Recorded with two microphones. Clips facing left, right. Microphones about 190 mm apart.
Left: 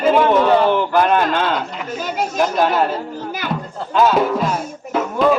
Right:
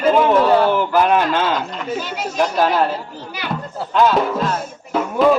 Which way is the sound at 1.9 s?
45° left (ahead or behind).